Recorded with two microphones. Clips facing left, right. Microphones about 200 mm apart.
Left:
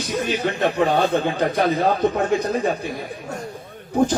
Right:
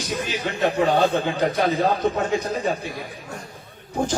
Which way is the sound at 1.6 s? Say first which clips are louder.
Left 3 dB; 55° left (ahead or behind).